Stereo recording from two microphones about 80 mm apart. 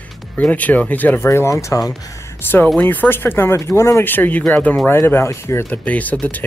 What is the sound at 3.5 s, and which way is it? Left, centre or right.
Speech, left.